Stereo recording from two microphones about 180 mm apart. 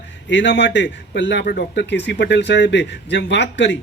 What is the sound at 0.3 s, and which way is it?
A man's voice, 75° left (ahead or behind).